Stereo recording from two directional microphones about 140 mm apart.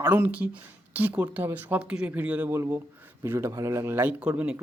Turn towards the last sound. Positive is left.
turn(degrees=-10)  # may be behind; listen again after turning